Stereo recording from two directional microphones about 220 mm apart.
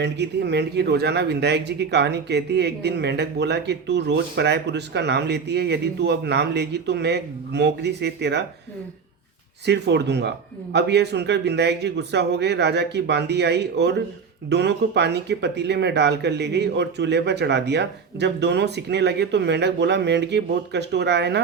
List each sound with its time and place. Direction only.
0.0 s speech: 50° right (ahead or behind)
9.6 s speech: 50° right (ahead or behind)